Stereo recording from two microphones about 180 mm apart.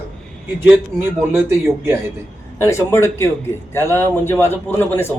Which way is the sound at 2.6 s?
15° left (ahead or behind).